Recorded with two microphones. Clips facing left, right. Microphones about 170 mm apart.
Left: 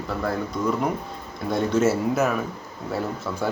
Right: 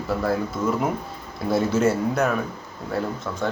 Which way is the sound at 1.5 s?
Centre (ahead or behind).